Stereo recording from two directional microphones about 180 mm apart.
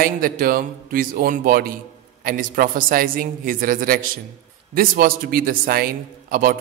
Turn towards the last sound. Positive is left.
turn(degrees=-55)  # may be behind; listen again after turning